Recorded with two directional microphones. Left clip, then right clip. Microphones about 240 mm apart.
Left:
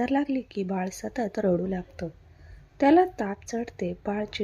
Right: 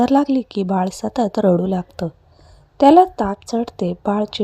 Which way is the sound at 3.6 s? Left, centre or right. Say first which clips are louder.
Right 9 dB; right.